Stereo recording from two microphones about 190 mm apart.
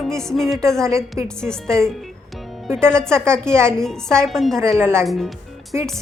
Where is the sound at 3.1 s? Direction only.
15° right (ahead or behind).